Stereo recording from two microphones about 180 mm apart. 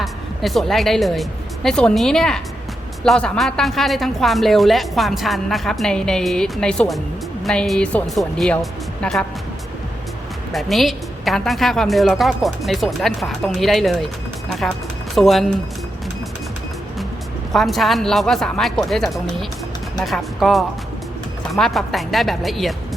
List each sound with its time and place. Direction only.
0.0 s a woman's voice: centre (ahead or behind)
10.5 s a woman's voice: centre (ahead or behind)
17.5 s a woman's voice: centre (ahead or behind)